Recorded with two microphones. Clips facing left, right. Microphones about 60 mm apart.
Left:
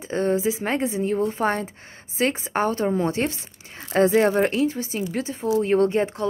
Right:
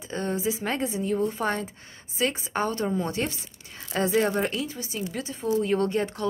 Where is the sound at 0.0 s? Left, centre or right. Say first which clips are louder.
Left 6 dB; left.